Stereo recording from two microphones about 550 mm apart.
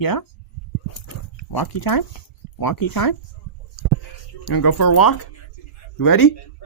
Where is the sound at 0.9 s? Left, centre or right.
Left.